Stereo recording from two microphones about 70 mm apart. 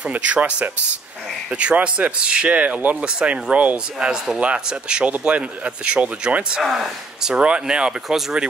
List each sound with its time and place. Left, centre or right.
0.1 s speech: right
6.6 s speech: centre